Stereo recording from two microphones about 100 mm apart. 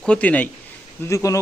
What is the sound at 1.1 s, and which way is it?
Speech, 30° left (ahead or behind).